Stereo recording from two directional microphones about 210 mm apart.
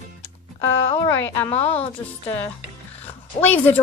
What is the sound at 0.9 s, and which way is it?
Speech, 10° left (ahead or behind).